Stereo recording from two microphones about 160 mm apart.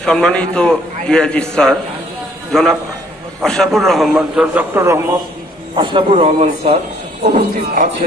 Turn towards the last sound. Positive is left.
turn(degrees=-50)  # may be behind; listen again after turning